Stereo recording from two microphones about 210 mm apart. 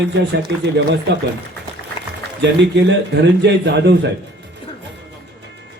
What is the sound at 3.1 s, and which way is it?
Speech, 55° right (ahead or behind).